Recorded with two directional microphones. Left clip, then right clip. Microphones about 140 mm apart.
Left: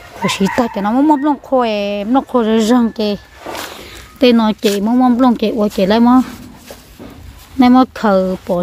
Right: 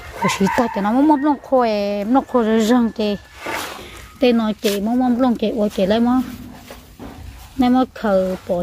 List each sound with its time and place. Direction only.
0.2 s speech: 30° left (ahead or behind)
4.2 s speech: 50° left (ahead or behind)
7.5 s speech: 50° left (ahead or behind)